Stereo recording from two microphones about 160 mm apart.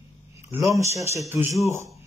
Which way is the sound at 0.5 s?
15° right (ahead or behind).